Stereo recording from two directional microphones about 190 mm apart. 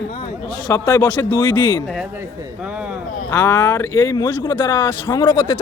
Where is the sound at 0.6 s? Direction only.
20° left (ahead or behind).